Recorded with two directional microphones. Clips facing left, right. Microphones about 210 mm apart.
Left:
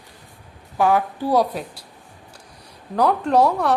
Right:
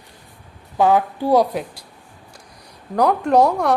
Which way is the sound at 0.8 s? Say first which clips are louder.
Right 2 dB; 20° right (ahead or behind).